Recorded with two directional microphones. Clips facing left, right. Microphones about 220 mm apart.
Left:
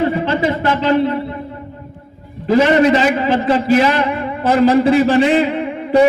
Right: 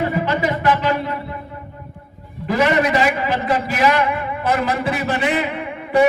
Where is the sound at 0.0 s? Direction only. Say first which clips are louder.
Left 4 dB; 30° left (ahead or behind).